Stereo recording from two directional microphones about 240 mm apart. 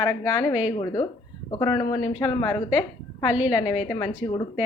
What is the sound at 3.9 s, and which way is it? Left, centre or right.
Speech, centre.